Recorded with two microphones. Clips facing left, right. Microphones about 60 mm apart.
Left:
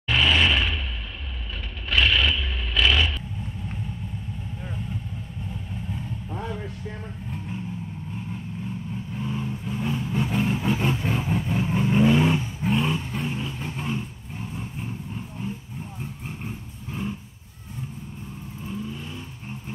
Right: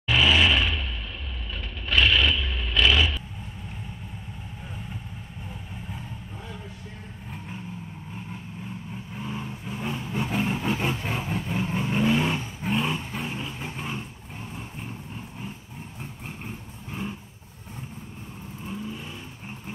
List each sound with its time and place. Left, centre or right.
0.1 s vehicle: centre
1.9 s vehicle: centre
9.1 s vehicle: centre